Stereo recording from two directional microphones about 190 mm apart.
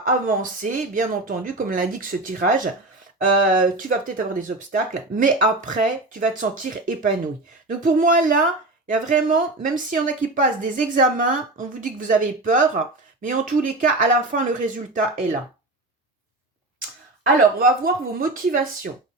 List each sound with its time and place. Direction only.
0.0 s speech: 45° right (ahead or behind)
17.6 s speech: 45° right (ahead or behind)